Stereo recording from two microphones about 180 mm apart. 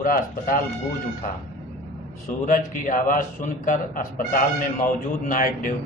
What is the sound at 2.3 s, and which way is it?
Speech, 50° left (ahead or behind).